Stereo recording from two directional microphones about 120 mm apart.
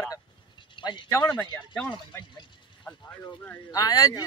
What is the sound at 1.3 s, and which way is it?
Speech, 35° left (ahead or behind).